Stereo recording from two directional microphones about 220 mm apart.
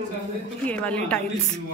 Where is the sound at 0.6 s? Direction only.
5° left (ahead or behind).